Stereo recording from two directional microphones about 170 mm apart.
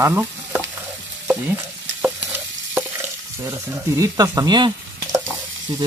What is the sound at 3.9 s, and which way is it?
Speech, 20° right (ahead or behind).